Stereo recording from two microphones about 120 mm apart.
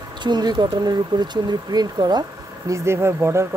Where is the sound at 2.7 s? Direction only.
20° right (ahead or behind).